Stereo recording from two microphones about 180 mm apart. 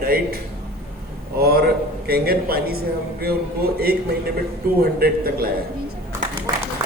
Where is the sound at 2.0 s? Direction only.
60° right (ahead or behind).